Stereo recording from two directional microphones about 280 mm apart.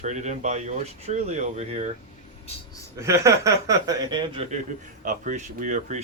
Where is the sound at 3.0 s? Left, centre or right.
Centre; by 6.0 s right.